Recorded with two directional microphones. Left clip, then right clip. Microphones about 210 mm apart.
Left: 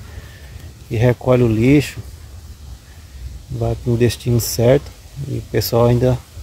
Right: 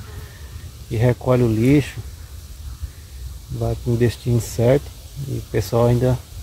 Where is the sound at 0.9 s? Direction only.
15° left (ahead or behind).